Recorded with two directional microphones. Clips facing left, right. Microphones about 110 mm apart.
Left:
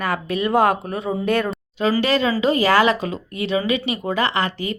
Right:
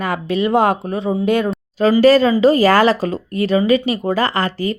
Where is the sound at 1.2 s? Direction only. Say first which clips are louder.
Right 3 dB; 15° right (ahead or behind).